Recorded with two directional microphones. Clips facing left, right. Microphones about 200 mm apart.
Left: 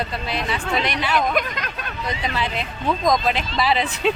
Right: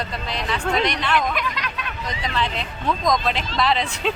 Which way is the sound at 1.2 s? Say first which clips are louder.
Left 2 dB; 45° left (ahead or behind).